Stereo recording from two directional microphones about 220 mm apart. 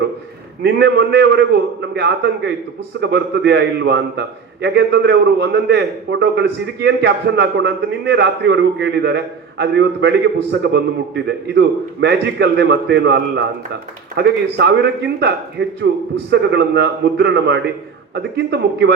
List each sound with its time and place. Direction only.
0.6 s a man's voice: 50° right (ahead or behind)